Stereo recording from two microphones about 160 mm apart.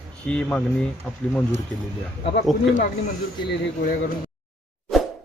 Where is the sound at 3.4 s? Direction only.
65° left (ahead or behind).